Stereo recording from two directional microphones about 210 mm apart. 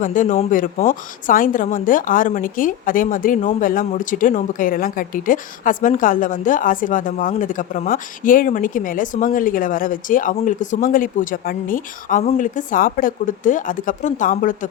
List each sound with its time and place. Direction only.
0.0 s a woman's voice: 40° left (ahead or behind)